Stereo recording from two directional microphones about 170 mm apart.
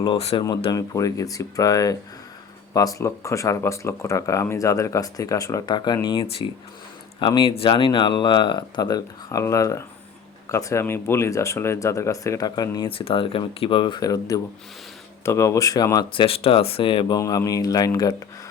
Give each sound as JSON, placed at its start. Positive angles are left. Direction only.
{"t": 0.0, "sound": "speech", "side_deg": 30}
{"t": 17.2, "sound": "speech", "side_deg": 20}